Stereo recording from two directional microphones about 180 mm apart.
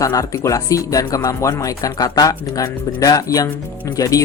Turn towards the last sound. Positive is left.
turn(degrees=20)  # may be behind; listen again after turning